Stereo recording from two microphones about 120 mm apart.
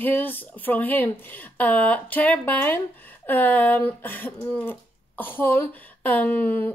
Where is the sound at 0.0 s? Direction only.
15° left (ahead or behind).